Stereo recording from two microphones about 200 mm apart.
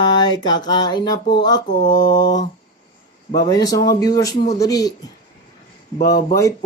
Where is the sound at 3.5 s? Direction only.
20° left (ahead or behind).